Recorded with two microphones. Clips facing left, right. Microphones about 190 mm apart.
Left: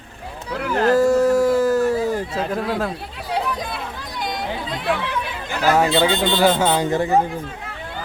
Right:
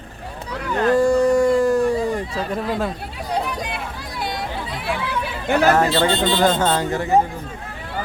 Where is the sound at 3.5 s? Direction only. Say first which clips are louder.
Left 1 dB; 10° right (ahead or behind).